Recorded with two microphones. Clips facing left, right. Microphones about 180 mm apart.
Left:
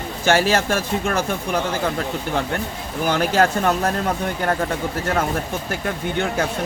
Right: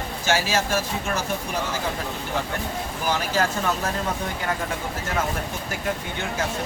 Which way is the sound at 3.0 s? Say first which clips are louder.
Left 6 dB; 60° left (ahead or behind).